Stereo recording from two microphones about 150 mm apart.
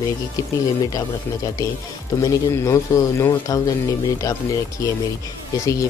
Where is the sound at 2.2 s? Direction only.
20° left (ahead or behind).